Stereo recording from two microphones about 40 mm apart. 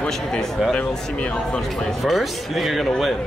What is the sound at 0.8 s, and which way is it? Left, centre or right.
Speech, left.